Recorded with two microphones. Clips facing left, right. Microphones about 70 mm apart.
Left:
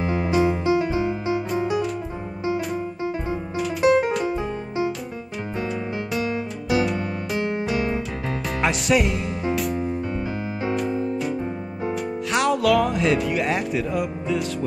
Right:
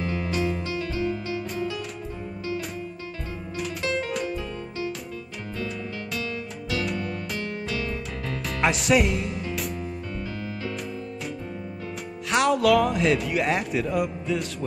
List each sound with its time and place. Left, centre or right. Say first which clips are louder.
0.0 s music: left 6 dB; left
2.4 s music: left 7 dB; left
6.2 s music: left 7 dB; left
8.5 s music: even; centre
11.9 s speech: left 2 dB; centre